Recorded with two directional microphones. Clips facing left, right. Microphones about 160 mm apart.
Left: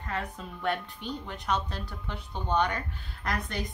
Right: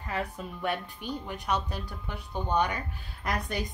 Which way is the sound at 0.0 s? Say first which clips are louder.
Right 2 dB; 5° right (ahead or behind).